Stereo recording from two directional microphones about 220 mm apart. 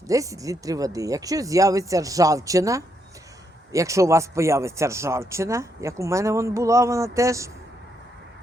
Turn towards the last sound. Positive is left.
turn(degrees=-15)  # may be behind; listen again after turning